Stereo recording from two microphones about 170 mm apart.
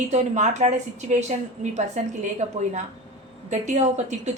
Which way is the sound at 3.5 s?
45° right (ahead or behind).